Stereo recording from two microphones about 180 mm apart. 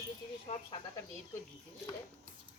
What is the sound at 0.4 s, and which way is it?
Speech, 35° left (ahead or behind).